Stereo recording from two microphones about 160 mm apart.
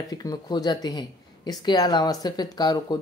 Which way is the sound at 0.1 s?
25° left (ahead or behind).